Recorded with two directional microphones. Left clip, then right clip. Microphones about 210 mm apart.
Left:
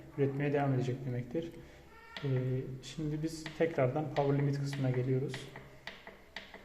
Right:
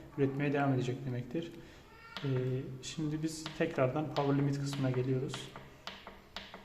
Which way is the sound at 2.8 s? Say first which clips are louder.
Right 1 dB; 10° right (ahead or behind).